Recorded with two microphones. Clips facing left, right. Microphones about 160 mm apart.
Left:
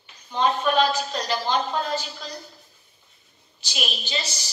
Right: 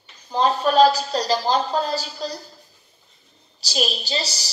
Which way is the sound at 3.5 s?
35° right (ahead or behind).